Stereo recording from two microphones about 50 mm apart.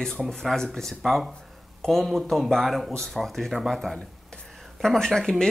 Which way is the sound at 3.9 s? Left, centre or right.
Centre.